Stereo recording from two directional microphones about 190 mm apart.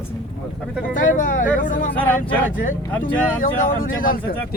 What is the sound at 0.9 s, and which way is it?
Speech, 45° left (ahead or behind).